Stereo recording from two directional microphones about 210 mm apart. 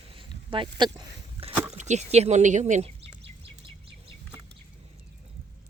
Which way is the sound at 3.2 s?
25° right (ahead or behind).